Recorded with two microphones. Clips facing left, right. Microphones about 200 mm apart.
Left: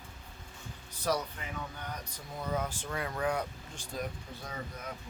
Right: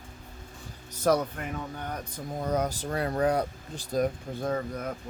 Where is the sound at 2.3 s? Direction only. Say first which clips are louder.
Right 6 dB; 40° right (ahead or behind).